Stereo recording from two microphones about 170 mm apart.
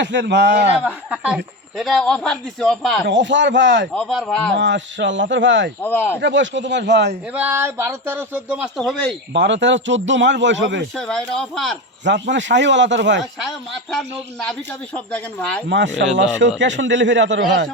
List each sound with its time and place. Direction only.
0.0 s speech: 90° right
0.9 s speech: 5° right (ahead or behind)
3.1 s speech: 90° right
3.9 s speech: 5° left (ahead or behind)
4.5 s speech: 90° right
5.8 s speech: 10° left (ahead or behind)
6.1 s speech: 90° right
7.3 s speech: 10° right (ahead or behind)
9.3 s speech: 90° right
10.9 s speech: 5° left (ahead or behind)
12.0 s speech: 90° right
13.9 s speech: 5° left (ahead or behind)
15.7 s speech: 90° right